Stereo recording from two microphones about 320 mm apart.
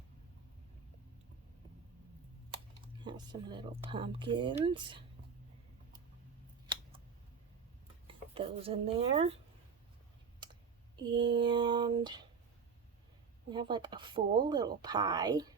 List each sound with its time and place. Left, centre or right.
2.5 s speech: centre
8.0 s speech: centre
10.4 s speech: centre
13.5 s speech: centre